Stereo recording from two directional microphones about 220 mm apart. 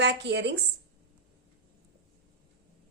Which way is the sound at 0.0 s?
50° right (ahead or behind).